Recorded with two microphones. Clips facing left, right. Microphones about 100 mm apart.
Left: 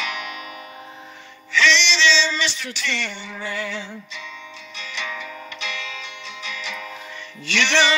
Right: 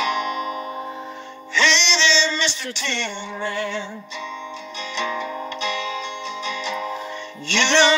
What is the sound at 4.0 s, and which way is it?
Music, 30° right (ahead or behind).